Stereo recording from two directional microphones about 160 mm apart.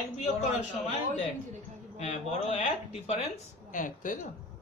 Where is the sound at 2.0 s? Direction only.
40° left (ahead or behind).